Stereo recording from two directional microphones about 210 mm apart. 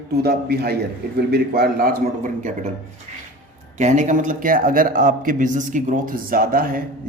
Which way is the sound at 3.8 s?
35° right (ahead or behind).